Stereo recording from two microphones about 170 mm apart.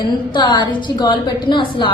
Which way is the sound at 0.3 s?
25° left (ahead or behind).